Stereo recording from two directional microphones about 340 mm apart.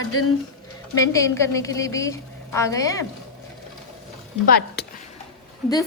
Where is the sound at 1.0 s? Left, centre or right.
Centre.